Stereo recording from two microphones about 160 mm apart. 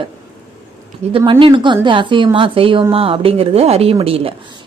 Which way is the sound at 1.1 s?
35° right (ahead or behind).